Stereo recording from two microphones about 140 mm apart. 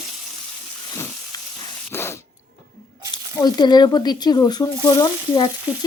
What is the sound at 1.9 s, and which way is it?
Spray, 15° left (ahead or behind).